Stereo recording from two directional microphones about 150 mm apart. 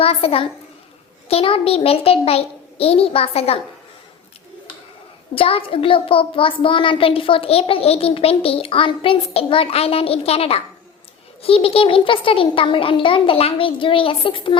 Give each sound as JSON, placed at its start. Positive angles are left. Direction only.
{"t": 0.0, "sound": "a child's voice", "side_deg": 40}
{"t": 5.3, "sound": "a child's voice", "side_deg": 40}